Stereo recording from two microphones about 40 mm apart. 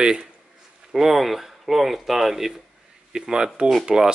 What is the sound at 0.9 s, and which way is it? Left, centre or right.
Speech, centre.